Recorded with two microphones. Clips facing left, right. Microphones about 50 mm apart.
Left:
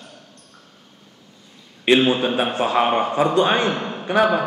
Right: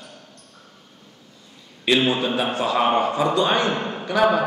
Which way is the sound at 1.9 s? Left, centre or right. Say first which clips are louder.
Left 3 dB; left.